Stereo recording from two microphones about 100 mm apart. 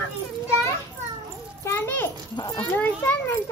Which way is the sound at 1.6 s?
20° left (ahead or behind).